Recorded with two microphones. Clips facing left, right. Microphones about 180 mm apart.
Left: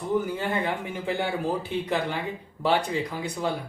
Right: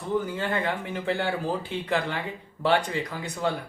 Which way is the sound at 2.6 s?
10° left (ahead or behind).